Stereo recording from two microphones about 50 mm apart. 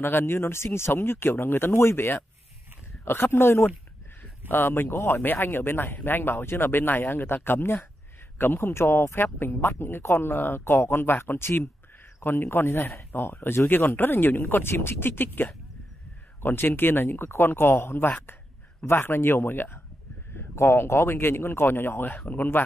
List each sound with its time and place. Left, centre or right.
0.0 s speech: left
5.2 s speech: left
16.4 s speech: left